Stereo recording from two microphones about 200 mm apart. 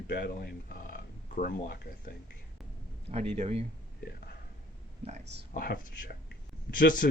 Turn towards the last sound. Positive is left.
turn(degrees=45)  # may be behind; listen again after turning